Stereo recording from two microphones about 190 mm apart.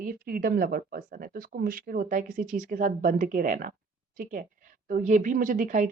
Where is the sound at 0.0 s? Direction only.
50° right (ahead or behind).